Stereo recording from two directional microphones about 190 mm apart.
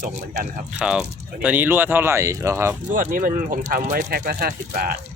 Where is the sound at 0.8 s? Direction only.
5° right (ahead or behind).